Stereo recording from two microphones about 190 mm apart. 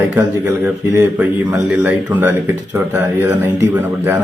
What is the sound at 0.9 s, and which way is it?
Speech, 15° right (ahead or behind).